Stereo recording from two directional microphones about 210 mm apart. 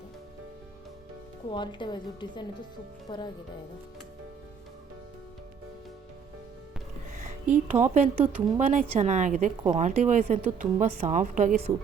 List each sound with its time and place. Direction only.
1.5 s a woman's voice: 20° left (ahead or behind)
7.5 s a woman's voice: 35° right (ahead or behind)